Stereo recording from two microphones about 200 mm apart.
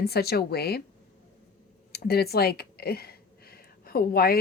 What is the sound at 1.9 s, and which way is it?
Speech, 50° left (ahead or behind).